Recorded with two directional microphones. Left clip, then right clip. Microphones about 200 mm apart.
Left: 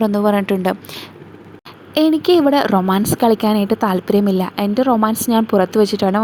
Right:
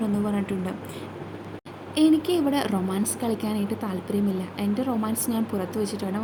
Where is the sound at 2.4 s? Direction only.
40° left (ahead or behind).